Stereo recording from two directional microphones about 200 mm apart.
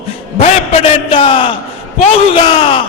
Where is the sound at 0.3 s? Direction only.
30° left (ahead or behind).